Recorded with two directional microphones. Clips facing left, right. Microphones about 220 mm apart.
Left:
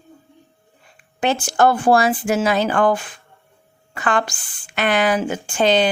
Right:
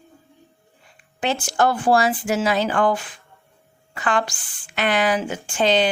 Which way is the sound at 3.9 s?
50° left (ahead or behind).